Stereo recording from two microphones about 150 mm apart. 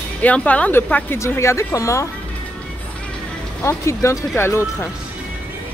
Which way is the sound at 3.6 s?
20° left (ahead or behind).